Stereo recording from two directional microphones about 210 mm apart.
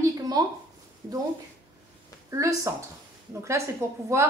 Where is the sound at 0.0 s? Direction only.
20° right (ahead or behind).